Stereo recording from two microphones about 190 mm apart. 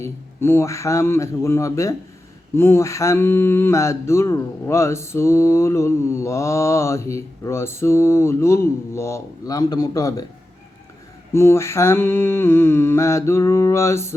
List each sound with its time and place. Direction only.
0.0 s mantra: 10° left (ahead or behind)
11.3 s mantra: 15° left (ahead or behind)